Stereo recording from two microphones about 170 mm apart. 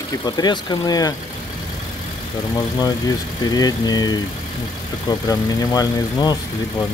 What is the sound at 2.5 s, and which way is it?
Speech, 20° left (ahead or behind).